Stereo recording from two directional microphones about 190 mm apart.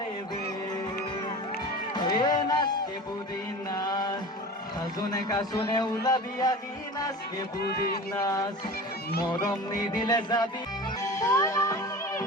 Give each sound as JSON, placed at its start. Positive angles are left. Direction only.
{"t": 2.1, "sound": "music", "side_deg": 20}
{"t": 3.7, "sound": "music", "side_deg": 20}
{"t": 4.9, "sound": "speech", "side_deg": 20}
{"t": 8.1, "sound": "speech", "side_deg": 20}
{"t": 11.0, "sound": "music", "side_deg": 15}